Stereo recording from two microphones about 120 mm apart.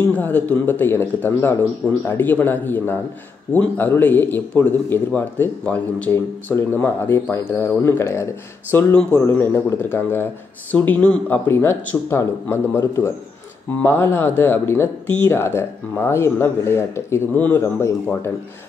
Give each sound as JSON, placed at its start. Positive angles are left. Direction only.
{"t": 0.0, "sound": "a man's voice", "side_deg": 15}